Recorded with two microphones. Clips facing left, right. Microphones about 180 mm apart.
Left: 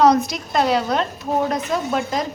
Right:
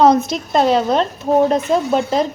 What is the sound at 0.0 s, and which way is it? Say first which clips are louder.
A woman's voice: right 3 dB; 25° right (ahead or behind).